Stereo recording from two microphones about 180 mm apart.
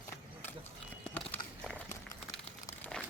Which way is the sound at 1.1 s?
10° left (ahead or behind).